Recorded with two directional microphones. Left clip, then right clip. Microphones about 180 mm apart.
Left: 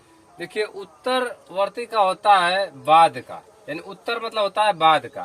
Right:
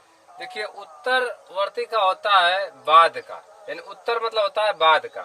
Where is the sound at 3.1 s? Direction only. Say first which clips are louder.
Even; 15° right (ahead or behind).